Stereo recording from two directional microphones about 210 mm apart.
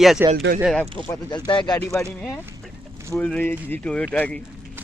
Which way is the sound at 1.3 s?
20° left (ahead or behind).